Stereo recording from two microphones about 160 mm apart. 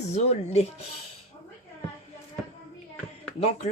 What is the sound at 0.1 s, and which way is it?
Speech, 45° left (ahead or behind).